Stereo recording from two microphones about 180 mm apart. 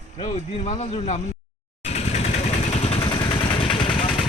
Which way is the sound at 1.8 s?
35° left (ahead or behind).